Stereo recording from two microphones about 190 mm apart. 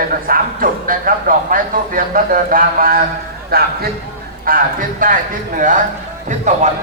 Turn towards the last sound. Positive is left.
turn(degrees=-40)  # may be behind; listen again after turning